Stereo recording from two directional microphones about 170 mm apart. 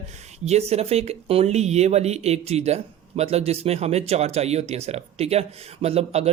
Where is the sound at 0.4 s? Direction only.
40° right (ahead or behind).